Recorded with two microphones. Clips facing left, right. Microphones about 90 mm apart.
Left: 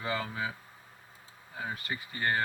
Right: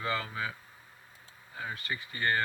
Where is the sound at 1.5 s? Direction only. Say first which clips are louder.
Left 1 dB; 15° left (ahead or behind).